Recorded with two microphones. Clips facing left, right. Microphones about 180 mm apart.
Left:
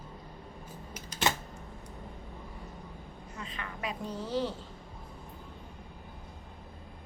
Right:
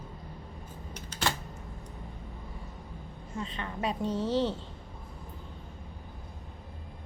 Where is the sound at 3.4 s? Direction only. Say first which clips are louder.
Right 5 dB; 30° right (ahead or behind).